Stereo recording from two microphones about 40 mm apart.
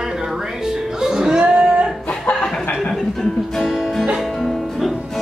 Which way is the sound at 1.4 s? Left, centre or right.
Right.